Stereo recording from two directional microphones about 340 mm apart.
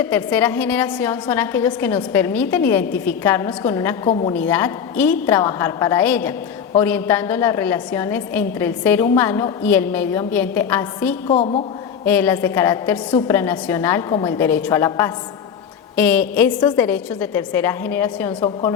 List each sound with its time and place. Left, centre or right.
0.0 s a woman's voice: centre
4.4 s a woman's voice: centre
11.3 s a woman's voice: centre
12.0 s a woman's voice: centre